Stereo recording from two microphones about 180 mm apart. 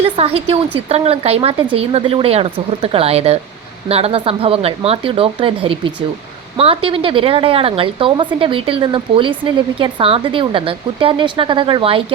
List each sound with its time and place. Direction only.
0.2 s speech: 35° right (ahead or behind)